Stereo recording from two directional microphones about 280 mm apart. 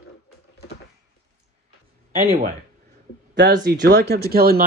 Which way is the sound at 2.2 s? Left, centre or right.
Right.